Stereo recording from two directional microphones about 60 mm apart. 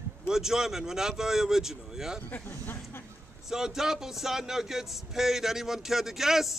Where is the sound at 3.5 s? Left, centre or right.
Centre.